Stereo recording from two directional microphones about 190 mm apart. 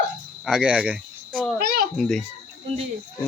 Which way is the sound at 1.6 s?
50° right (ahead or behind).